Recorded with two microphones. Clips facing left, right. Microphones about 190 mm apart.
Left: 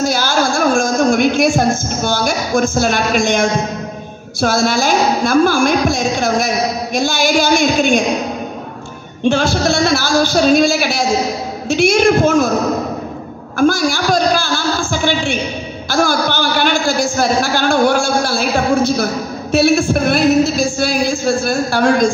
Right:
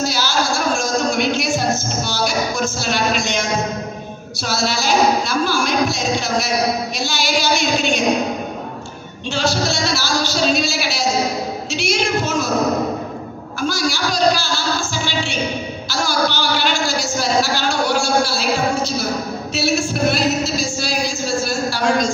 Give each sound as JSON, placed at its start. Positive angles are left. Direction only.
{"t": 0.0, "sound": "music", "side_deg": 50}
{"t": 4.4, "sound": "a woman's voice", "side_deg": 50}
{"t": 9.2, "sound": "a woman's voice", "side_deg": 55}
{"t": 13.6, "sound": "a woman's voice", "side_deg": 50}